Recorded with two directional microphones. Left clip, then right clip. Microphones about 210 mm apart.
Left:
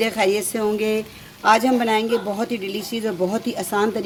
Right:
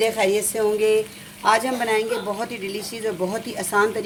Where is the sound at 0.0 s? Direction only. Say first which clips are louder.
Even; 50° left (ahead or behind).